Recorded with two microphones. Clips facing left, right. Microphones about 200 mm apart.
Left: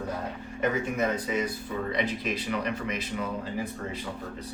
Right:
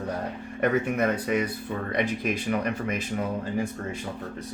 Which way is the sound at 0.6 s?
60° right (ahead or behind).